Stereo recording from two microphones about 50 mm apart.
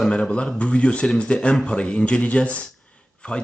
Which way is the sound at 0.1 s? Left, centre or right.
Left.